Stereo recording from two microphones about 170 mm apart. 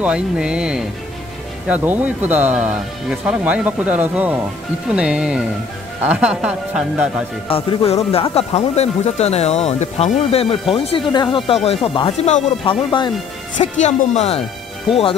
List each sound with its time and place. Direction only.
0.0 s speech: 5° right (ahead or behind)
7.4 s speech: 35° left (ahead or behind)
13.6 s speech: 45° left (ahead or behind)